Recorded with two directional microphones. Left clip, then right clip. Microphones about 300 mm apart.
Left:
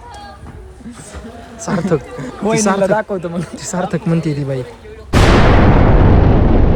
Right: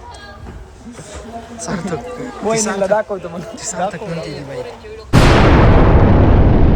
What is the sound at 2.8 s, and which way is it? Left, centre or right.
Speech, left.